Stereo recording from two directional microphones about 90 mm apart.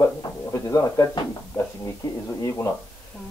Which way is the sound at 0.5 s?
40° left (ahead or behind).